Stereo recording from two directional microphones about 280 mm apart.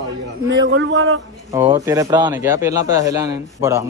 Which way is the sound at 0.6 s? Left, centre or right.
Right.